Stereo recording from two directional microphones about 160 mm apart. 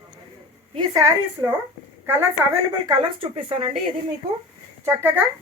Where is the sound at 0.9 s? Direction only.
20° right (ahead or behind).